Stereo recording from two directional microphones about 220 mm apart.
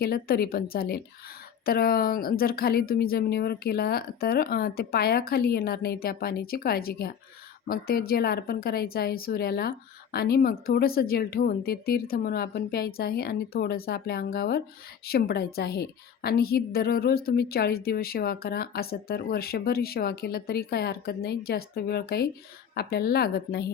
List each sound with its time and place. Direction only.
0.0 s a woman's voice: 45° left (ahead or behind)